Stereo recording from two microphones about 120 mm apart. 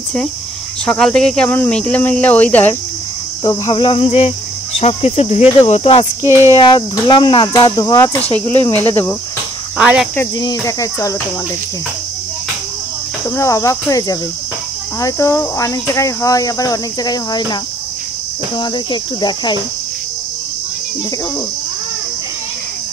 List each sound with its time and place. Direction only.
0.8 s speech: 5° left (ahead or behind)
3.4 s cricket: 40° left (ahead or behind)
4.7 s speech: 60° left (ahead or behind)
6.2 s speech: 20° right (ahead or behind)
6.5 s speech: 40° left (ahead or behind)
9.8 s cricket: 10° right (ahead or behind)
10.4 s speech: 25° left (ahead or behind)
13.4 s speech: 25° left (ahead or behind)
18.6 s speech: 40° left (ahead or behind)